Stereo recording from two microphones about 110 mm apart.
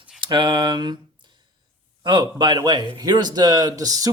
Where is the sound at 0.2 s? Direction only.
45° right (ahead or behind).